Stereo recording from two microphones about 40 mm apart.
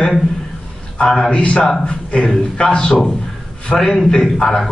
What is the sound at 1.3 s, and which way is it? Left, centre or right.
A man's voice, left.